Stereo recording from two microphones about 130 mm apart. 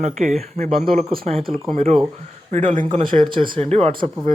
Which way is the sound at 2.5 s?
90° right.